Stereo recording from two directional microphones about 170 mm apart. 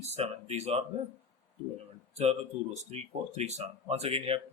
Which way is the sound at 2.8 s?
40° right (ahead or behind).